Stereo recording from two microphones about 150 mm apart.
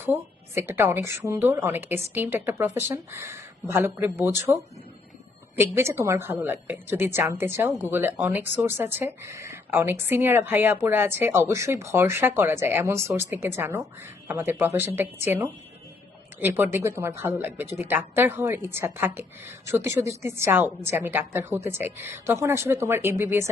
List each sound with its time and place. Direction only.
0.0 s speech: 15° right (ahead or behind)